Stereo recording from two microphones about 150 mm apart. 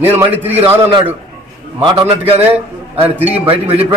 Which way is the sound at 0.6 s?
40° right (ahead or behind).